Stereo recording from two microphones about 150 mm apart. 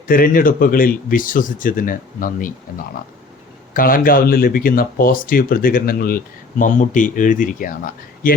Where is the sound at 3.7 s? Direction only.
70° left (ahead or behind).